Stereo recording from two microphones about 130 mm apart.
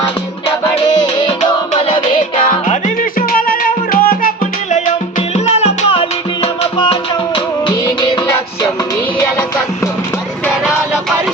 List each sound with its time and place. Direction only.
0.0 s music: 35° left (ahead or behind)
2.5 s music: 80° left
5.3 s music: 55° left (ahead or behind)